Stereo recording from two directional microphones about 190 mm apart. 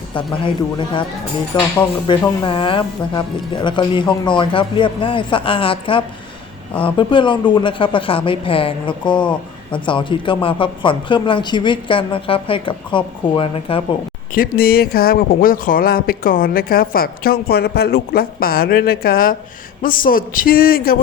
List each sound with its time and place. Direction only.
0.1 s speech: 25° left (ahead or behind)
14.3 s speech: 50° left (ahead or behind)